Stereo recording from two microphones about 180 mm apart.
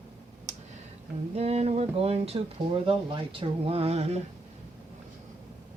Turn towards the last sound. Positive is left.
turn(degrees=-35)  # may be behind; listen again after turning